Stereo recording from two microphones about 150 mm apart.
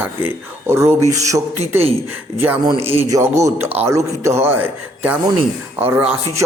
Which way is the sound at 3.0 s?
20° right (ahead or behind).